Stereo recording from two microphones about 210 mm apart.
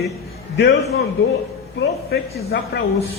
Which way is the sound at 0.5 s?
55° left (ahead or behind).